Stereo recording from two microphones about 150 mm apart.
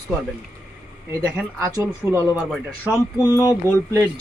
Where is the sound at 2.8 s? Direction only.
20° left (ahead or behind).